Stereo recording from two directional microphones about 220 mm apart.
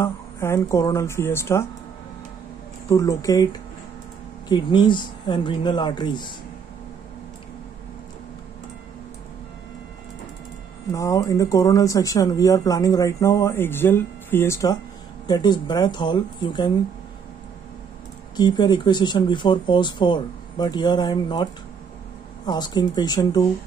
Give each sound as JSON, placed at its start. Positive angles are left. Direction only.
{"t": 0.0, "sound": "speech", "side_deg": 10}
{"t": 2.9, "sound": "speech", "side_deg": 15}
{"t": 4.5, "sound": "speech", "side_deg": 20}
{"t": 10.9, "sound": "speech", "side_deg": 15}
{"t": 18.3, "sound": "speech", "side_deg": 20}
{"t": 22.5, "sound": "speech", "side_deg": 20}